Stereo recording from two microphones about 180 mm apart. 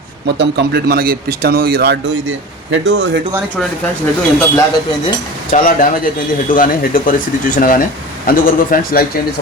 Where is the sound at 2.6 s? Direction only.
85° right.